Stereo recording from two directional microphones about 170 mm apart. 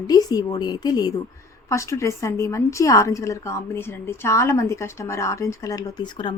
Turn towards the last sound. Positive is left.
turn(degrees=25)  # may be behind; listen again after turning